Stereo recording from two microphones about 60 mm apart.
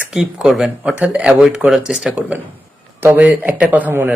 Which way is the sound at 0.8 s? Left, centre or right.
Right.